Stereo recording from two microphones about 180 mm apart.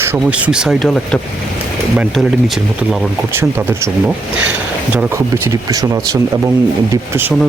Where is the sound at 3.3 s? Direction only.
15° right (ahead or behind).